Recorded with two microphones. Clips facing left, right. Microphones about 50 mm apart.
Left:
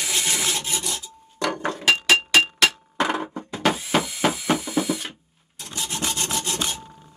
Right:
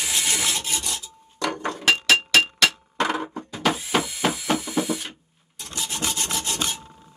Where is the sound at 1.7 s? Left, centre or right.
Centre.